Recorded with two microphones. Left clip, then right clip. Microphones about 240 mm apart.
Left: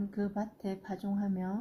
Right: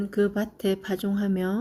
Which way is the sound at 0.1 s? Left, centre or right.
Right.